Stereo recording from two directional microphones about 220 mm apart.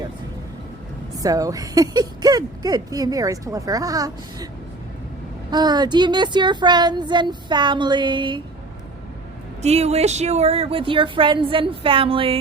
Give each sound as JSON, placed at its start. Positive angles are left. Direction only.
{"t": 1.2, "sound": "speech", "side_deg": -15}
{"t": 5.5, "sound": "speech", "side_deg": -20}
{"t": 9.6, "sound": "speech", "side_deg": -30}